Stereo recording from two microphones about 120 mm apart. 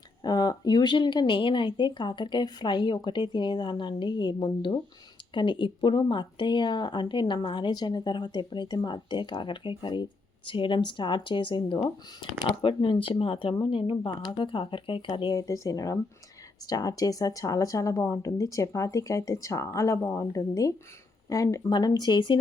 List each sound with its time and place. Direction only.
0.2 s speech: 35° left (ahead or behind)
15.4 s speech: 25° left (ahead or behind)